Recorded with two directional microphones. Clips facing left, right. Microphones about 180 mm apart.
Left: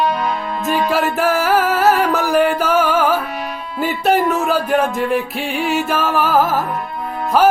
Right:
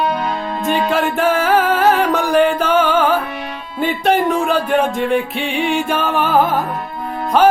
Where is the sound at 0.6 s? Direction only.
5° left (ahead or behind).